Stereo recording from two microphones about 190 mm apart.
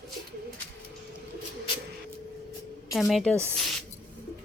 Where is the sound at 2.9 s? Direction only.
Centre (ahead or behind).